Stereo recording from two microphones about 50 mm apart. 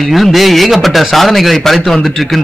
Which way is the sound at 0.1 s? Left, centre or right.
Centre.